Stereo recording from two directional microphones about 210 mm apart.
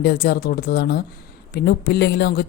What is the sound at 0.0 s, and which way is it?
Speech, 50° left (ahead or behind).